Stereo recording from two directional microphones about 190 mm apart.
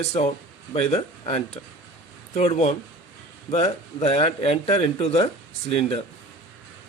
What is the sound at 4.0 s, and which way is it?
Speech, 35° left (ahead or behind).